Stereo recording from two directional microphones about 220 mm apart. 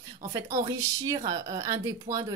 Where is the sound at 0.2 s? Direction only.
15° right (ahead or behind).